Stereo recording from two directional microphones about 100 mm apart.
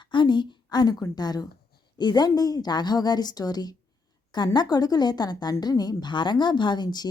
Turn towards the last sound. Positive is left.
turn(degrees=45)  # may be behind; listen again after turning